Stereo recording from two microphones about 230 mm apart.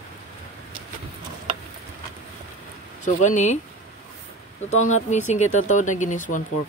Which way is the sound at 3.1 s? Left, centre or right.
Left.